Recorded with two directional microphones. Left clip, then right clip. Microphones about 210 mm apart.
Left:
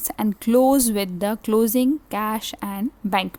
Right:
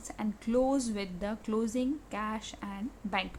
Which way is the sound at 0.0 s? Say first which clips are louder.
Left 12 dB; 55° left (ahead or behind).